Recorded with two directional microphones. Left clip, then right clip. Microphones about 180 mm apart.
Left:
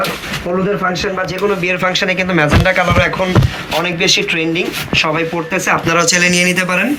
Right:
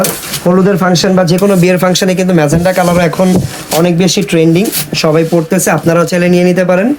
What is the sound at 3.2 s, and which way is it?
Speech, 70° right (ahead or behind).